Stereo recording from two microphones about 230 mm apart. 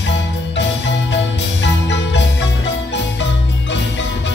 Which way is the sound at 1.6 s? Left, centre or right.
Left.